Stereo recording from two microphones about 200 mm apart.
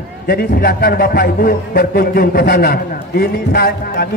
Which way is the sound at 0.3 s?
50° left (ahead or behind).